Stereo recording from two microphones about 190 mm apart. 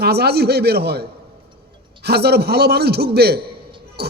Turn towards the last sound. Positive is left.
turn(degrees=-55)  # may be behind; listen again after turning